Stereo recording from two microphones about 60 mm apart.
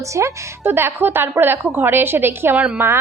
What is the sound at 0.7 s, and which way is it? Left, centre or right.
A woman's voice, right.